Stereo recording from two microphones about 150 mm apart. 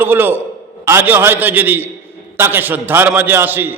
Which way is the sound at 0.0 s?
15° right (ahead or behind).